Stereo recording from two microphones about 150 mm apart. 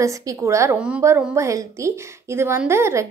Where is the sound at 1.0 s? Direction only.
20° right (ahead or behind).